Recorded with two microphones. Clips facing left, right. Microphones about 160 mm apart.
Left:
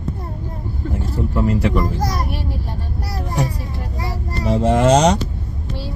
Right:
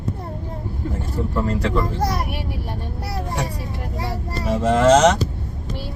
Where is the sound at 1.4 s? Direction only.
10° left (ahead or behind).